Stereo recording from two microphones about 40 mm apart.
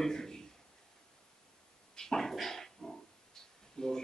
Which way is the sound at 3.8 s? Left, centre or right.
Centre.